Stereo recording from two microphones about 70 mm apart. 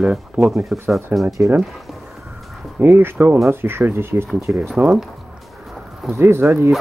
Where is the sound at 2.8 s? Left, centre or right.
Right.